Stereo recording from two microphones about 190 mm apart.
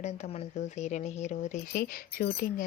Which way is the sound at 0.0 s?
35° left (ahead or behind).